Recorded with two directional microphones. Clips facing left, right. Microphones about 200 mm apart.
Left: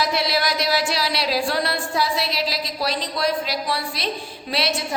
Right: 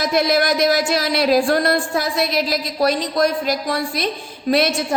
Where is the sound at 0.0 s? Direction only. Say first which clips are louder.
Right 5 dB; 50° right (ahead or behind).